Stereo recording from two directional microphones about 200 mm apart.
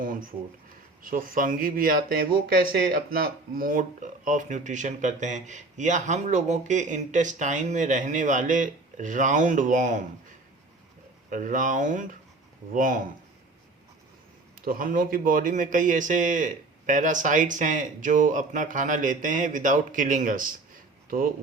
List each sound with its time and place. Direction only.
1.0 s speech: 45° right (ahead or behind)
11.3 s speech: 40° right (ahead or behind)
14.6 s speech: 45° right (ahead or behind)